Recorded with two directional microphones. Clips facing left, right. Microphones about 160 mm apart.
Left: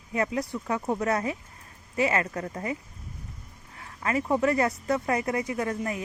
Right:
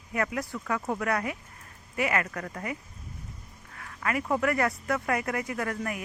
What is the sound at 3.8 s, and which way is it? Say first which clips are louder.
Speech: left 2 dB; 25° left (ahead or behind).